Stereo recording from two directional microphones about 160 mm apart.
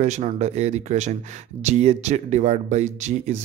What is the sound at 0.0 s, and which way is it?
Speech, 50° right (ahead or behind).